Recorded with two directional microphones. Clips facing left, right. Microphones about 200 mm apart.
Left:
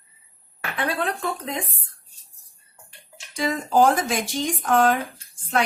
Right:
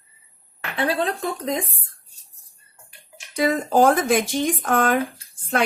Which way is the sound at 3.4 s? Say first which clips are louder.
Right 2 dB; 55° right (ahead or behind).